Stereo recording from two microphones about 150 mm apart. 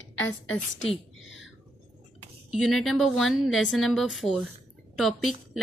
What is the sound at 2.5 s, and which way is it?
A woman's voice, centre (ahead or behind).